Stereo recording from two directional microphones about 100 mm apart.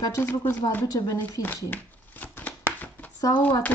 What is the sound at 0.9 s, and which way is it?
Speech, 40° left (ahead or behind).